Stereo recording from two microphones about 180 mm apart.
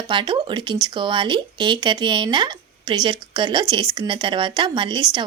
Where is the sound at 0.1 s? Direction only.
25° right (ahead or behind).